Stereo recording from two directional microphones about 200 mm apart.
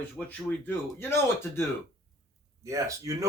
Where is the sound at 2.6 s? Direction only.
15° right (ahead or behind).